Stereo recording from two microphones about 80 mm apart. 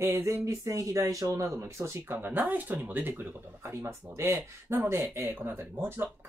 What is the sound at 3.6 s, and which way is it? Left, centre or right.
Speech, right.